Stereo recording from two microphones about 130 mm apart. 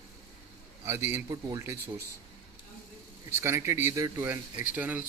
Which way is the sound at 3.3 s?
20° right (ahead or behind).